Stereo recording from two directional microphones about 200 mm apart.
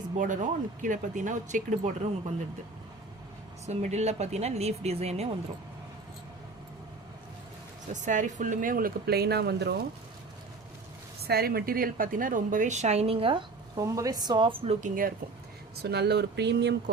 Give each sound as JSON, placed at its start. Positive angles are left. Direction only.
{"t": 0.2, "sound": "a woman's voice", "side_deg": -40}
{"t": 3.7, "sound": "a woman's voice", "side_deg": -35}
{"t": 8.0, "sound": "speech", "side_deg": -40}
{"t": 11.2, "sound": "a woman's voice", "side_deg": -50}
{"t": 15.7, "sound": "speech", "side_deg": -55}